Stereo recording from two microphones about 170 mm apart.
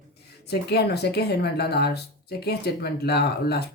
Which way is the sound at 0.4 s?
70° left (ahead or behind).